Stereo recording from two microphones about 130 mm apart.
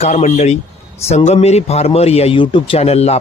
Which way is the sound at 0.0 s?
60° left (ahead or behind).